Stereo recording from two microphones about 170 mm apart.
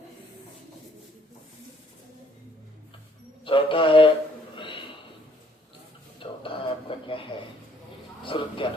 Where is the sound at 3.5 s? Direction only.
30° left (ahead or behind).